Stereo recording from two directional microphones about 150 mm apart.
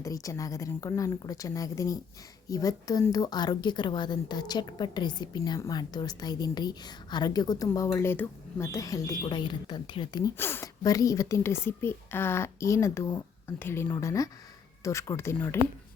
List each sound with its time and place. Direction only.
0.0 s a woman's voice: 20° left (ahead or behind)
10.3 s a woman's voice: 15° left (ahead or behind)